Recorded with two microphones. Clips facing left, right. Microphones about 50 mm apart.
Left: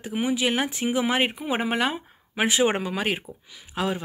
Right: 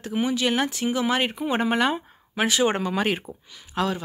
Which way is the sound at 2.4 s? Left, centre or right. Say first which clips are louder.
Even; left.